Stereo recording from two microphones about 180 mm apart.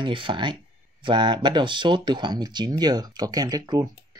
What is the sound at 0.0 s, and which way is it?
Speech, 25° right (ahead or behind).